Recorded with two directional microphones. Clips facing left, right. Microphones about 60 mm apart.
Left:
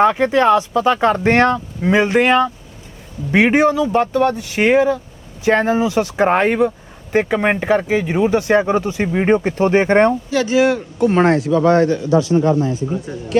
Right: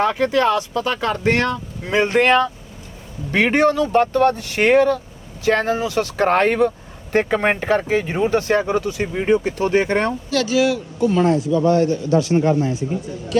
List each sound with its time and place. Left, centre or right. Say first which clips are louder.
0.0 s speech: left 4 dB; left
1.9 s speech: left 2 dB; centre
5.5 s speech: left 3 dB; left
11.3 s speech: left 3 dB; left